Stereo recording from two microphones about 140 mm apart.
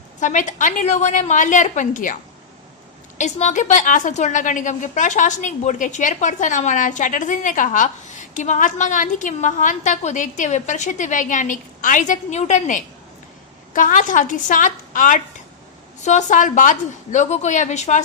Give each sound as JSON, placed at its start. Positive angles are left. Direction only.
{"t": 0.2, "sound": "a woman's voice", "side_deg": 60}
{"t": 3.2, "sound": "a woman's voice", "side_deg": 55}